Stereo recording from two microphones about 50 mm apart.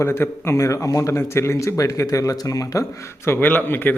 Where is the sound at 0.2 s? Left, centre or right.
Left.